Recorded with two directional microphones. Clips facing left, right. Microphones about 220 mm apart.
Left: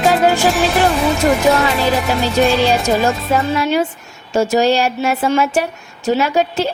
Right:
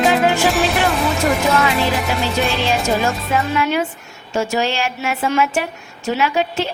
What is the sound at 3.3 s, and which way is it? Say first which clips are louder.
A woman's voice: left 2 dB; 35° left (ahead or behind).